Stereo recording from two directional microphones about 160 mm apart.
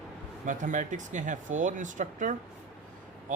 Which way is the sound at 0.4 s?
50° right (ahead or behind).